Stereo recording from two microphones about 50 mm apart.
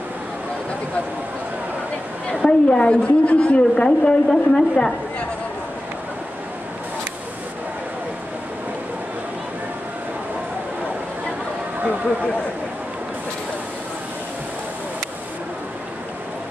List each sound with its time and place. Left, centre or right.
2.4 s a woman's voice: centre